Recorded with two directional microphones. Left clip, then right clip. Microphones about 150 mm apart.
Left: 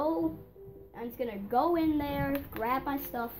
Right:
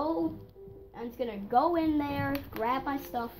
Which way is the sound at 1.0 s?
30° right (ahead or behind).